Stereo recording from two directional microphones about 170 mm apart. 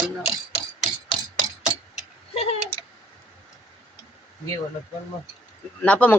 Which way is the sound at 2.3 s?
35° left (ahead or behind).